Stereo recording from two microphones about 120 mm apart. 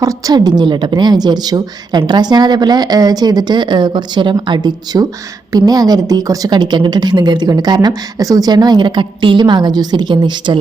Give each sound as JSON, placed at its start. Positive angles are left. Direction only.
{"t": 0.0, "sound": "a woman's voice", "side_deg": -30}